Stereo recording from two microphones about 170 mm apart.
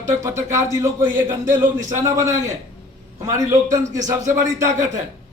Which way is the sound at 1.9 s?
20° right (ahead or behind).